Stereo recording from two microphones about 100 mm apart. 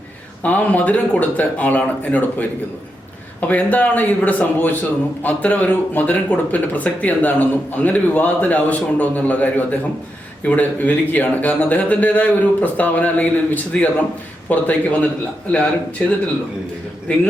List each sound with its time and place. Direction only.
0.4 s a man's voice: 15° left (ahead or behind)
17.1 s a man's voice: 15° left (ahead or behind)